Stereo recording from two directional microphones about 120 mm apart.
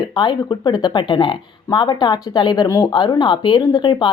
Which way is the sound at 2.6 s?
25° left (ahead or behind).